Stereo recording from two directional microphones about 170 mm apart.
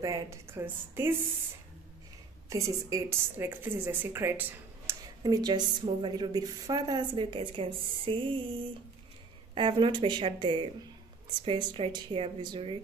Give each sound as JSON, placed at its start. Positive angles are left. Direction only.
{"t": 0.0, "sound": "speech", "side_deg": -20}
{"t": 2.5, "sound": "speech", "side_deg": -20}
{"t": 5.2, "sound": "a woman's voice", "side_deg": -25}